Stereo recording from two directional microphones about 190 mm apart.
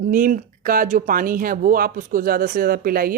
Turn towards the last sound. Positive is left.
turn(degrees=-50)  # may be behind; listen again after turning